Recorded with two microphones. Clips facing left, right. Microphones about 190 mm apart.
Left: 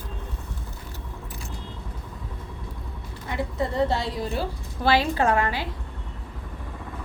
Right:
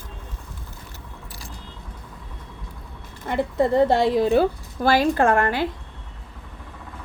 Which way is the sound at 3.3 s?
55° right (ahead or behind).